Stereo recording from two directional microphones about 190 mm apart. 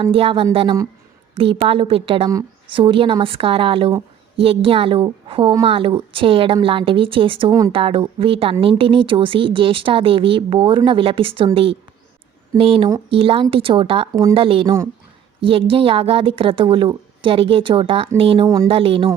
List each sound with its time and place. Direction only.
0.0 s speech: 30° right (ahead or behind)
18.7 s speech: 30° right (ahead or behind)